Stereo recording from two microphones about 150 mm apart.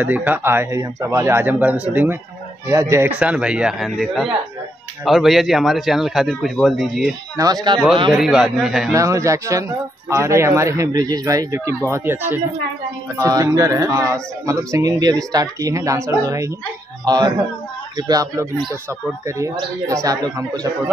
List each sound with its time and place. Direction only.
0.0 s a man's voice: 10° right (ahead or behind)
7.3 s speech: 25° right (ahead or behind)
8.1 s a man's voice: centre (ahead or behind)
8.9 s speech: 20° right (ahead or behind)